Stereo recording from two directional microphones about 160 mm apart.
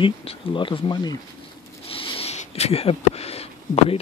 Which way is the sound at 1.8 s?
35° left (ahead or behind).